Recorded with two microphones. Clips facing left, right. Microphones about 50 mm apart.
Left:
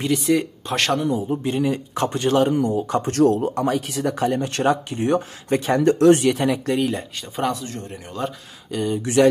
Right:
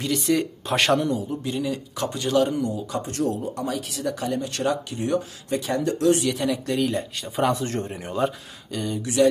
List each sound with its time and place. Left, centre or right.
0.3 s speech: centre
0.7 s speech: centre
1.3 s speech: left
3.1 s speech: left
6.9 s speech: centre
7.5 s speech: right
8.2 s speech: centre
8.7 s speech: centre
9.0 s speech: left